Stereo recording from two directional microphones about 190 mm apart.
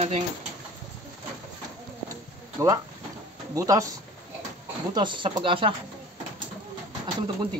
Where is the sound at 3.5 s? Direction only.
15° right (ahead or behind).